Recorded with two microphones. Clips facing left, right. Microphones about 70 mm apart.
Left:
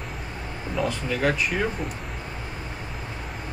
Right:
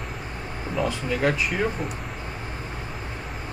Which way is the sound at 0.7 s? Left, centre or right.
Right.